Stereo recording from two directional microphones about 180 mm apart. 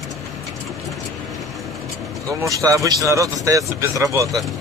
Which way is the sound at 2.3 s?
20° right (ahead or behind).